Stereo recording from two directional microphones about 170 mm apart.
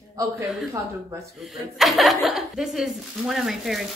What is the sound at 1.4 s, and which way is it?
A woman's voice, centre (ahead or behind).